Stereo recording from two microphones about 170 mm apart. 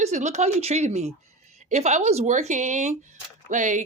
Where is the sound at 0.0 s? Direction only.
45° right (ahead or behind).